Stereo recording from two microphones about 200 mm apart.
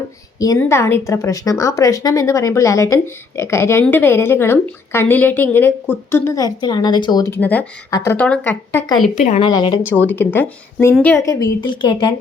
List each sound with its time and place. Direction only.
0.3 s a woman's voice: 15° left (ahead or behind)
9.1 s a woman's voice: 35° left (ahead or behind)
9.5 s a woman's voice: 20° left (ahead or behind)
9.9 s a woman's voice: 10° left (ahead or behind)